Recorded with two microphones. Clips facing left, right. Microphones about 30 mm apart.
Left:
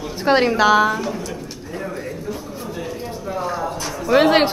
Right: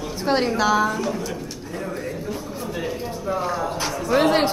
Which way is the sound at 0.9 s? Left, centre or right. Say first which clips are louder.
Left 1 dB; centre.